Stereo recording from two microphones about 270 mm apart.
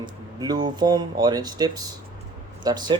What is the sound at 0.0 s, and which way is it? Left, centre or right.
Speech, centre.